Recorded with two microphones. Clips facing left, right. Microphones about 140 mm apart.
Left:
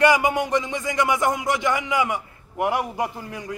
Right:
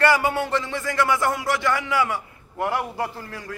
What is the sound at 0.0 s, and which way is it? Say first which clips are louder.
A man's voice: left 2 dB; 15° left (ahead or behind).